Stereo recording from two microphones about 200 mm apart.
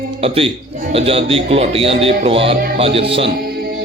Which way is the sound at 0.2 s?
30° right (ahead or behind).